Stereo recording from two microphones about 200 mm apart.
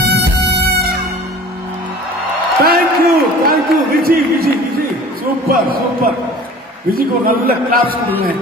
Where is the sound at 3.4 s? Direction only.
50° right (ahead or behind).